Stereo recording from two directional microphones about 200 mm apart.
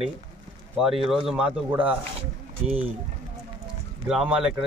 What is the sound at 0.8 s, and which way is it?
Speech, centre (ahead or behind).